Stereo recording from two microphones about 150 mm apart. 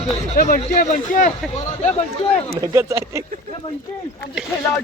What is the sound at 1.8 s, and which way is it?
Speech, 45° left (ahead or behind).